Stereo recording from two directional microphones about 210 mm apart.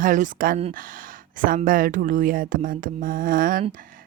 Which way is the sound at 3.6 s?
40° right (ahead or behind).